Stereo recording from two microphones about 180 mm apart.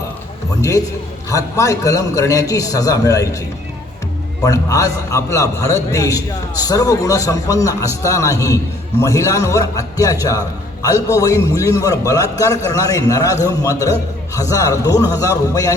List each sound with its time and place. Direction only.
1.3 s a man's voice: 20° left (ahead or behind)
4.4 s a man's voice: 20° left (ahead or behind)